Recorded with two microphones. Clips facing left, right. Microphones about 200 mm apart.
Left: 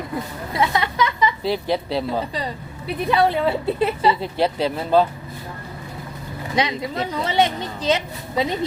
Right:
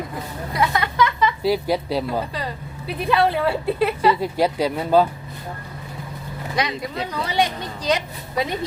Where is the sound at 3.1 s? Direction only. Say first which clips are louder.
Even; 15° left (ahead or behind).